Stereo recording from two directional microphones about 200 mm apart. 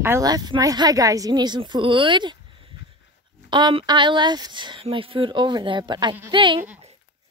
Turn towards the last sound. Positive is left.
turn(degrees=-25)  # may be behind; listen again after turning